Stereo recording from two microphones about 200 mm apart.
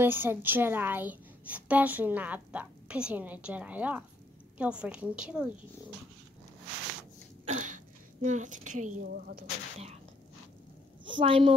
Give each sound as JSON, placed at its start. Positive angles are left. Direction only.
{"t": 0.0, "sound": "a woman's voice", "side_deg": -10}
{"t": 7.5, "sound": "a woman's voice", "side_deg": -40}
{"t": 11.1, "sound": "a woman's voice", "side_deg": -25}